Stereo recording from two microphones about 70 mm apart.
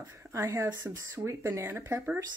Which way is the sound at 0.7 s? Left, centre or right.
Right.